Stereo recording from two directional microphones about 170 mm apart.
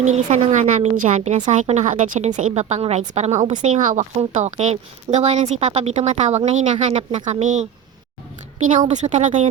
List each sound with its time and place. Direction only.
0.0 s a woman's voice: 45° right (ahead or behind)
8.9 s a woman's voice: 45° right (ahead or behind)